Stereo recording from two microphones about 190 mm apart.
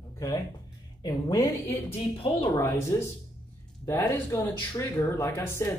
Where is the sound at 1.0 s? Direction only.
20° left (ahead or behind).